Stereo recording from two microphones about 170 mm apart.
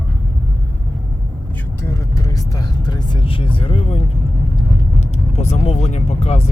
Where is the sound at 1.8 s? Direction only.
15° left (ahead or behind); by 4.0 s 35° left (ahead or behind).